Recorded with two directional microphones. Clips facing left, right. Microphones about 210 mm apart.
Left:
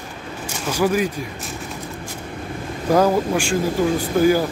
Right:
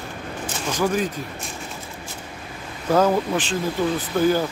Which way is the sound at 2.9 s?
10° left (ahead or behind).